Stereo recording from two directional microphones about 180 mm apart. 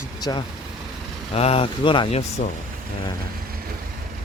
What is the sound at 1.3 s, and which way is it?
Speech, 35° left (ahead or behind).